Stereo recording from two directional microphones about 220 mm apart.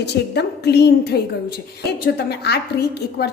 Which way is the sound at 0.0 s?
50° left (ahead or behind).